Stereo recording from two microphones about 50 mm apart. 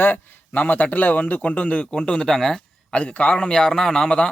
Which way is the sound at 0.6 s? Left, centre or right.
Left.